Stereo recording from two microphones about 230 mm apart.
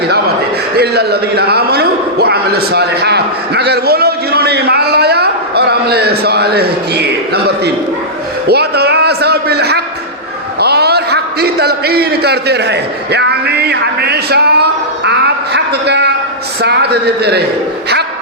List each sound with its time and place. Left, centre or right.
0.8 s a man's voice: right
10.6 s a sound: right
16.6 s a man's voice: right